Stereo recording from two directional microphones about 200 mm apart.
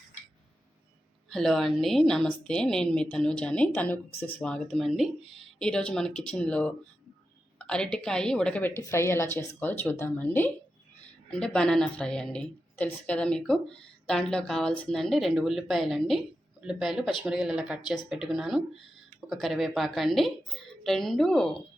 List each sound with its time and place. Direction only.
1.3 s a woman's voice: centre (ahead or behind)